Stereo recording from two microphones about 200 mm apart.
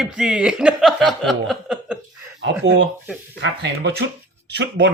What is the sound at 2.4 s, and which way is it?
Speech, 65° right (ahead or behind).